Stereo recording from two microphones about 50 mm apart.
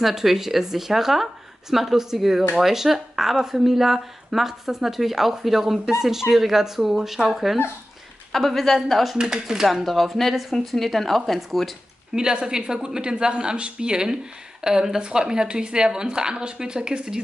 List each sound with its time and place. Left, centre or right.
0.0 s a woman's voice: centre
9.1 s speech: centre
9.7 s a woman's voice: centre
12.2 s speech: centre